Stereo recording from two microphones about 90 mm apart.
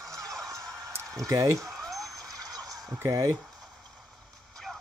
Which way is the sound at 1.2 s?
40° right (ahead or behind).